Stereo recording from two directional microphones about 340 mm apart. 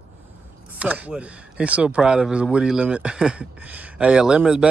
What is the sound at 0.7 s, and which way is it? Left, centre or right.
Speech, centre.